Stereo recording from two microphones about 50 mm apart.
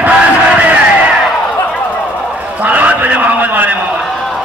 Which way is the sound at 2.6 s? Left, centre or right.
Right.